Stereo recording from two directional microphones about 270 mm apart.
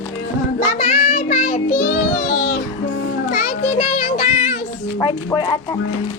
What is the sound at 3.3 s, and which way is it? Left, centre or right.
Music, left.